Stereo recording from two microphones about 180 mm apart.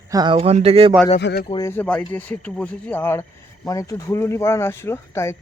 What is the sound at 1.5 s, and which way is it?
Speech, 20° left (ahead or behind).